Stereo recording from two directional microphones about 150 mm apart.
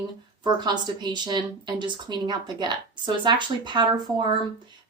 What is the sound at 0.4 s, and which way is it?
A woman's voice, 30° right (ahead or behind).